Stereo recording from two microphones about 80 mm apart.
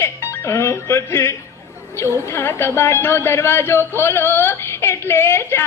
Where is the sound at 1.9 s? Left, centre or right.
Left.